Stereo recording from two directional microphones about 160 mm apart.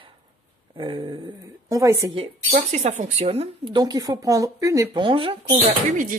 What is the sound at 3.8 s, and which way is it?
Speech, 25° right (ahead or behind).